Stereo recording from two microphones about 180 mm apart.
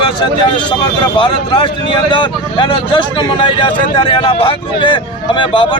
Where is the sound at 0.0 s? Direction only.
25° left (ahead or behind).